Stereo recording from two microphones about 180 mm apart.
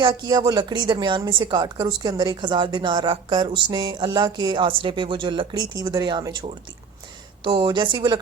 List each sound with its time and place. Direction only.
0.0 s a woman's voice: 25° right (ahead or behind)
7.4 s a woman's voice: 25° right (ahead or behind)